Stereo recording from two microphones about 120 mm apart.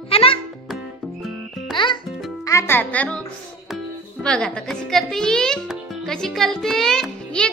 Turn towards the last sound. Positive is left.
turn(degrees=5)  # may be behind; listen again after turning